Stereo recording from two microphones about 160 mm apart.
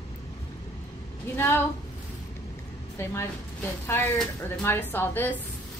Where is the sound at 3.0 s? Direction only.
15° left (ahead or behind).